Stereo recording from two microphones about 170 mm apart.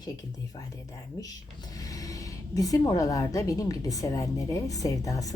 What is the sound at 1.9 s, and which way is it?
A woman's voice, 20° left (ahead or behind).